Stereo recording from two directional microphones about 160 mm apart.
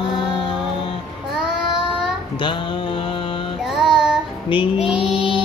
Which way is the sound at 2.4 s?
30° left (ahead or behind).